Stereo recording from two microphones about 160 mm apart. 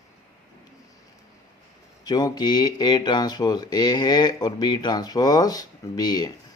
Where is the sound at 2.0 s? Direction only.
25° left (ahead or behind).